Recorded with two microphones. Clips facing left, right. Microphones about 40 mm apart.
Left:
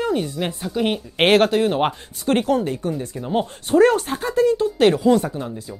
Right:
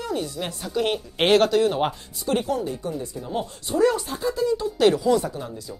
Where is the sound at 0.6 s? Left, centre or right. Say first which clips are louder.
Even; centre.